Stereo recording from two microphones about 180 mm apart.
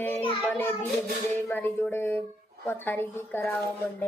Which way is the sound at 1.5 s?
10° left (ahead or behind).